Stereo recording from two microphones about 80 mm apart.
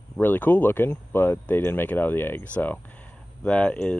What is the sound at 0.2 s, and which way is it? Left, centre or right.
Speech, left.